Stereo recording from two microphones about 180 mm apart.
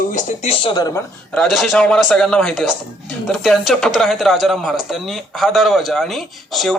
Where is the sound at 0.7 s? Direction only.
20° left (ahead or behind).